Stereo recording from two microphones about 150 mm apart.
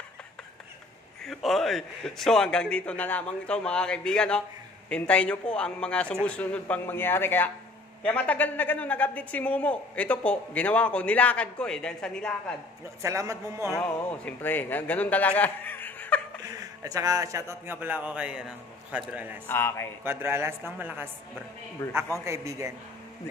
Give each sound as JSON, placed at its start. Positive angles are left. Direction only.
{"t": 1.2, "sound": "a man's voice", "side_deg": 0}
{"t": 13.0, "sound": "a man's voice", "side_deg": -20}
{"t": 13.7, "sound": "a man's voice", "side_deg": 10}
{"t": 16.4, "sound": "a man's voice", "side_deg": -25}
{"t": 19.4, "sound": "a man's voice", "side_deg": 15}
{"t": 20.0, "sound": "a man's voice", "side_deg": -15}
{"t": 21.8, "sound": "a man's voice", "side_deg": 15}
{"t": 22.2, "sound": "a man's voice", "side_deg": -20}